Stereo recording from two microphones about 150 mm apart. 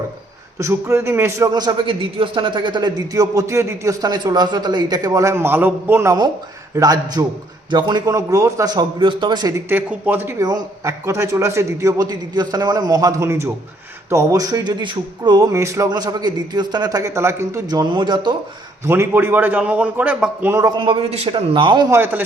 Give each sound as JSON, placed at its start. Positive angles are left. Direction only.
{"t": 0.6, "sound": "a man's voice", "side_deg": -15}
{"t": 18.9, "sound": "a man's voice", "side_deg": -15}
{"t": 21.9, "sound": "a man's voice", "side_deg": -15}